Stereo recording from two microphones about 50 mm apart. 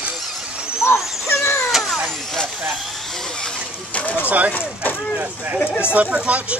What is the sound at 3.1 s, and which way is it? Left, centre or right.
Speech, centre.